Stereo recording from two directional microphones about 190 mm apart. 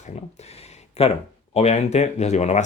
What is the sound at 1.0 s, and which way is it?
Speech, 30° left (ahead or behind).